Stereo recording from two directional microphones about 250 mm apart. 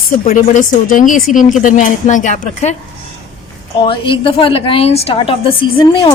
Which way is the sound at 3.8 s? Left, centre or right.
Left.